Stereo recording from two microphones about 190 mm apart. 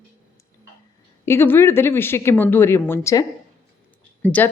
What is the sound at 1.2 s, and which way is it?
Speech, 10° left (ahead or behind).